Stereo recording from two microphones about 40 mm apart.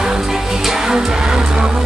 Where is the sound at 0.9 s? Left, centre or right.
Centre.